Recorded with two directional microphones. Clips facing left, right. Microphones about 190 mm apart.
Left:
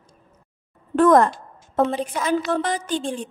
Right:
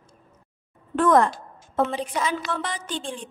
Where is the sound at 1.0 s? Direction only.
40° left (ahead or behind).